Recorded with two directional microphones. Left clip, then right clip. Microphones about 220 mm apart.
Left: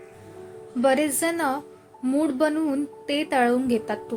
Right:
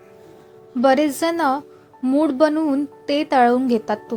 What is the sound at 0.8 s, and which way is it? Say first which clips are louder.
Speech: right 5 dB; 20° right (ahead or behind).